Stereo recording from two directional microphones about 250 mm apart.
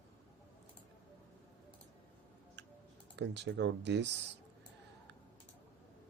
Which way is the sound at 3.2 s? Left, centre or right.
Right.